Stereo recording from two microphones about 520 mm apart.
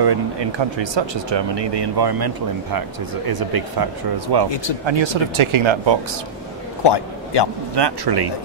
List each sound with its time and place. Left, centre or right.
0.0 s speech: right
4.8 s speech: right
6.8 s a sound: left
7.7 s speech: right